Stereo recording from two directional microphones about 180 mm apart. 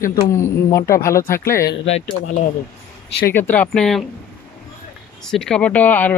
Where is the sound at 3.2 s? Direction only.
10° left (ahead or behind).